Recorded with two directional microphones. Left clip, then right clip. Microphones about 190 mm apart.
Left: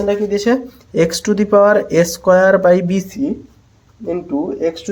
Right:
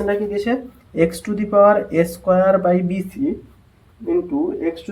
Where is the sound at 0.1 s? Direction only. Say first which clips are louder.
Left 7 dB; 55° left (ahead or behind).